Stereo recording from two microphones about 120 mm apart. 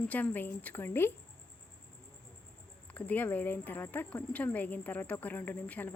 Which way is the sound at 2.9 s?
15° left (ahead or behind).